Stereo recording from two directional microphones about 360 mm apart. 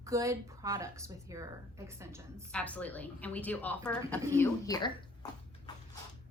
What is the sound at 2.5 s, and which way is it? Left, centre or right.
A woman's voice, centre.